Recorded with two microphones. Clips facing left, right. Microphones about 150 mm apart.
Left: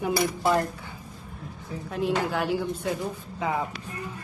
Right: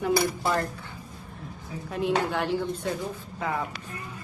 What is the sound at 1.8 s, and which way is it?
A woman's voice, centre (ahead or behind).